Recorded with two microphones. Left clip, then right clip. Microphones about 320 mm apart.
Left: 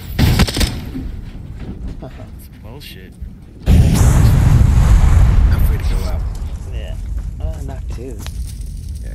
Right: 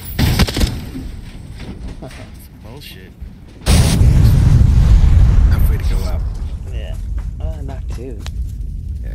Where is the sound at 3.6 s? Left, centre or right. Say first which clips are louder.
Right 3 dB; centre.